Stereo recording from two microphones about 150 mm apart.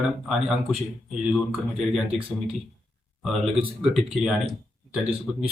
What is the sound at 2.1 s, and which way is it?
Speech, 35° right (ahead or behind).